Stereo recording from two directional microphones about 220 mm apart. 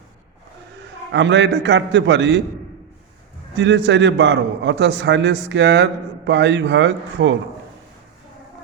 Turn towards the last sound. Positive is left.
turn(degrees=-55)  # may be behind; listen again after turning